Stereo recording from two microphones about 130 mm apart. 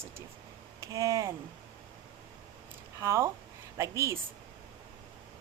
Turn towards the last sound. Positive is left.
turn(degrees=-25)  # may be behind; listen again after turning